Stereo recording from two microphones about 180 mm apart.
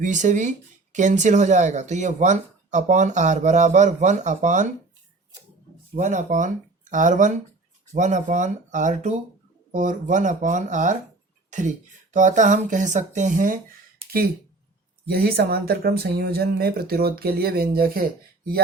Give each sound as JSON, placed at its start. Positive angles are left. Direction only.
{"t": 0.0, "sound": "speech", "side_deg": -45}
{"t": 5.9, "sound": "speech", "side_deg": -40}
{"t": 15.0, "sound": "speech", "side_deg": -60}